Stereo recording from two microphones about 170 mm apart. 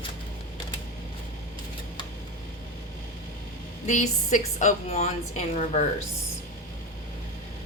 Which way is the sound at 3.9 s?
50° left (ahead or behind).